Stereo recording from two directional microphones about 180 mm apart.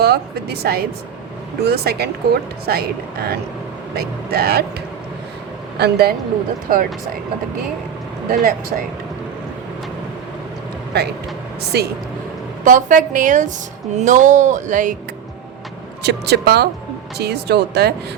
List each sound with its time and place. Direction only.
0.0 s a woman's voice: 60° right (ahead or behind)
5.7 s speech: 65° right (ahead or behind)
6.7 s speech: 50° right (ahead or behind)
8.3 s speech: 55° right (ahead or behind)
11.7 s a woman's voice: 65° right (ahead or behind)
12.6 s speech: 45° right (ahead or behind)
16.0 s a woman's voice: 65° right (ahead or behind)